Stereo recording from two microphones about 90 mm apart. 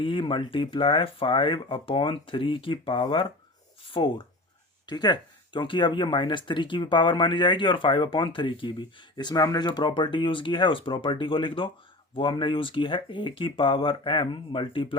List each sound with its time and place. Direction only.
0.0 s speech: 70° left (ahead or behind)
4.9 s speech: 50° left (ahead or behind); by 14.9 s 70° left (ahead or behind)